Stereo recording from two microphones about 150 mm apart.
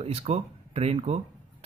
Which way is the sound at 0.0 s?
45° right (ahead or behind).